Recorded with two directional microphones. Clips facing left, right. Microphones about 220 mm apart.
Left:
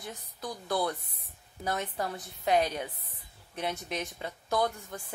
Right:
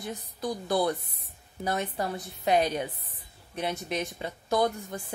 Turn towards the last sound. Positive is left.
turn(degrees=-15)  # may be behind; listen again after turning